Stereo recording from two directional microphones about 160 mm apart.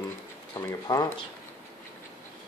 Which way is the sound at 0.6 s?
20° left (ahead or behind).